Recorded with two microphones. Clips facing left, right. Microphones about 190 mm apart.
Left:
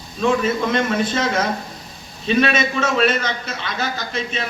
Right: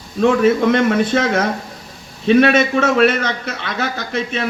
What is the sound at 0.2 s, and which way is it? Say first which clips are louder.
A man's voice: right 6 dB; 60° right (ahead or behind).